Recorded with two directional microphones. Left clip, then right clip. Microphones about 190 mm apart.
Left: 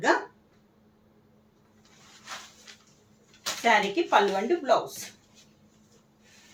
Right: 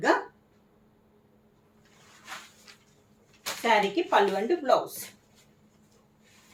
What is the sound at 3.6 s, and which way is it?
Speech, 10° right (ahead or behind).